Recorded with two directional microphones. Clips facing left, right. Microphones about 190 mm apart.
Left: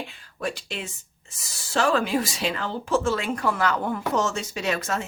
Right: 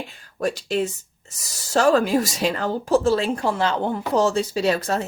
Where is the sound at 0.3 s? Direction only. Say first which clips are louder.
Right 8 dB; 40° right (ahead or behind).